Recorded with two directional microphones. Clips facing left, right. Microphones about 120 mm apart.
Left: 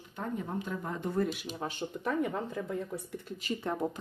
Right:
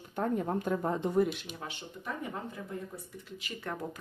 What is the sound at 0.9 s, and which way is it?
Speech, 25° right (ahead or behind).